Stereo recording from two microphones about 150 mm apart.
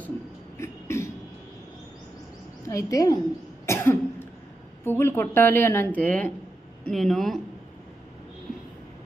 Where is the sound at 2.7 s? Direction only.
20° left (ahead or behind).